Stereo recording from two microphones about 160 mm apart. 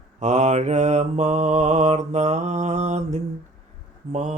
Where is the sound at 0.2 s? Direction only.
45° right (ahead or behind).